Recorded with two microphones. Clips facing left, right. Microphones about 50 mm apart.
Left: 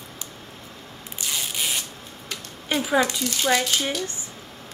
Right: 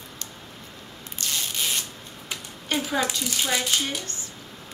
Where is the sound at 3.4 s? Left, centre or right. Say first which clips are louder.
Left 5 dB; centre.